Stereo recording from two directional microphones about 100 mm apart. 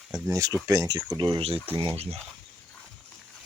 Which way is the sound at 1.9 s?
90° right.